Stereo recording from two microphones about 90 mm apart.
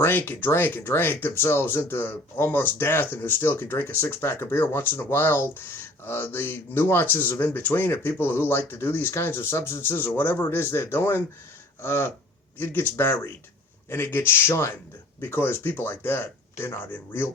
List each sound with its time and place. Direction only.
0.0 s speech: 25° left (ahead or behind)